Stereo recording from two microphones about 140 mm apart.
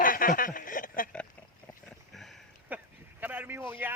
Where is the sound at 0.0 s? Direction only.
75° left (ahead or behind).